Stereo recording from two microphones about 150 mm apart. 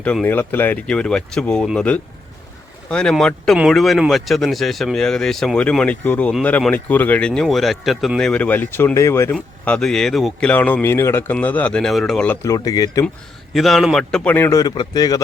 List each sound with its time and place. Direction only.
0.0 s speech: 10° left (ahead or behind)
9.3 s speech: 5° left (ahead or behind)
12.4 s speech: 25° left (ahead or behind)
13.5 s speech: centre (ahead or behind); by 15.2 s 25° left (ahead or behind)